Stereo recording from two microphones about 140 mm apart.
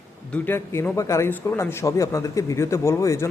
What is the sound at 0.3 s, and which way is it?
A man's voice, 10° left (ahead or behind).